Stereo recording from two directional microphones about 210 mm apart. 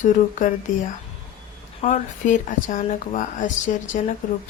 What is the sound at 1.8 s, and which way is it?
Speech, 35° left (ahead or behind).